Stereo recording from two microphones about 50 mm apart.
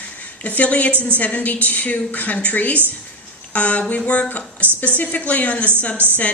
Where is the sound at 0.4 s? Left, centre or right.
Left.